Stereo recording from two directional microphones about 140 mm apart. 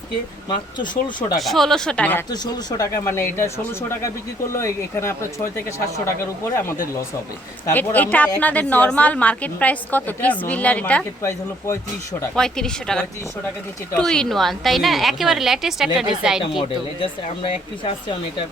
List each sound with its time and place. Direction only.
0.4 s speech: 35° left (ahead or behind)
1.4 s a woman's voice: centre (ahead or behind)
2.3 s a woman's voice: 30° left (ahead or behind)
12.3 s a woman's voice: 5° left (ahead or behind)
16.4 s speech: 35° left (ahead or behind)